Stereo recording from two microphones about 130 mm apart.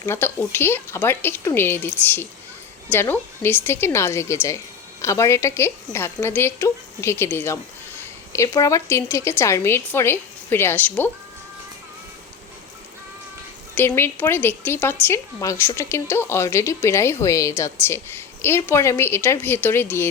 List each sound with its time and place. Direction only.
0.0 s a woman's voice: 15° left (ahead or behind)
13.7 s a woman's voice: 15° left (ahead or behind)